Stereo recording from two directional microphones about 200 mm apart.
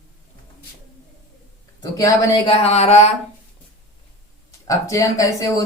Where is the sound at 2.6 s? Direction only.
30° left (ahead or behind).